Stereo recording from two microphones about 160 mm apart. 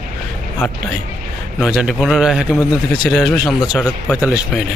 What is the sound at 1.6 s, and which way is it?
A man's voice, 5° right (ahead or behind).